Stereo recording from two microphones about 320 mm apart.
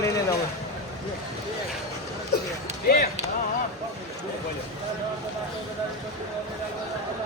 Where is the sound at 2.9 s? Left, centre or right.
Left.